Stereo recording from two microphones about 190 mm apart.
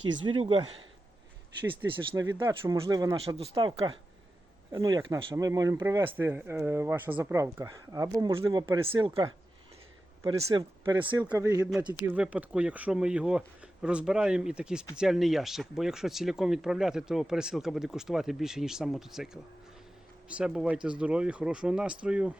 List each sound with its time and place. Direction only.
0.3 s speech: 25° right (ahead or behind)
1.9 s speech: 20° right (ahead or behind)